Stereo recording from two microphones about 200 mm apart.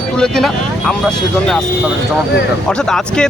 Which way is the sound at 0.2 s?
Centre (ahead or behind).